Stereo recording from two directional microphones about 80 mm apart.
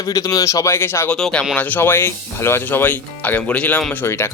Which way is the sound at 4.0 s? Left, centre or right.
Left.